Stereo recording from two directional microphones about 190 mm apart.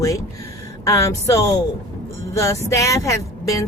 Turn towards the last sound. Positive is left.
turn(degrees=15)  # may be behind; listen again after turning